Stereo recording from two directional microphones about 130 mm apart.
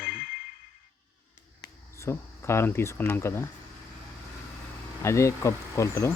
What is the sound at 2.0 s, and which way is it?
Speech, 20° left (ahead or behind).